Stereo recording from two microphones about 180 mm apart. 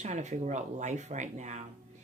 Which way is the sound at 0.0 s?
40° right (ahead or behind).